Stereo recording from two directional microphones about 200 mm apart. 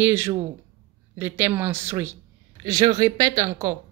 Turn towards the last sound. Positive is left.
turn(degrees=-15)  # may be behind; listen again after turning